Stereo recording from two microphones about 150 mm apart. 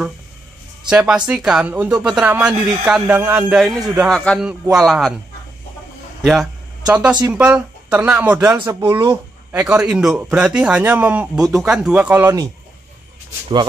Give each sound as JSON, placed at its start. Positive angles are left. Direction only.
{"t": 0.8, "sound": "speech", "side_deg": -5}
{"t": 3.5, "sound": "speech", "side_deg": 0}
{"t": 6.2, "sound": "speech", "side_deg": 0}
{"t": 8.8, "sound": "speech", "side_deg": -25}
{"t": 9.1, "sound": "speech", "side_deg": -10}